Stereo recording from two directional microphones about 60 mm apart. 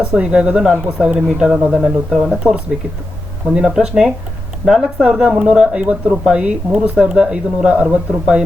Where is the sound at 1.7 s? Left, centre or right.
Centre.